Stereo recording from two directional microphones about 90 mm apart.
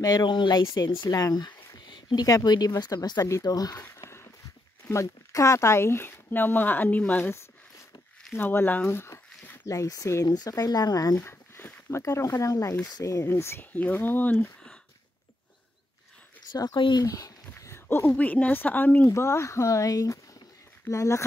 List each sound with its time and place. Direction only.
0.0 s speech: 50° left (ahead or behind)
2.2 s speech: 40° left (ahead or behind)
2.5 s speech: 50° left (ahead or behind)
3.8 s a sound: 30° left (ahead or behind)
4.8 s speech: 35° left (ahead or behind); by 7.2 s 15° left (ahead or behind)
8.3 s speech: 25° left (ahead or behind)
9.7 s speech: 40° left (ahead or behind)
10.2 s speech: 45° left (ahead or behind)
11.1 s speech: 25° left (ahead or behind); by 13.3 s 40° left (ahead or behind)
13.3 s speech: 25° left (ahead or behind)
16.5 s speech: 45° left (ahead or behind)
17.0 s a sound: 40° left (ahead or behind)
18.1 s speech: 15° left (ahead or behind)
19.0 s speech: 30° left (ahead or behind)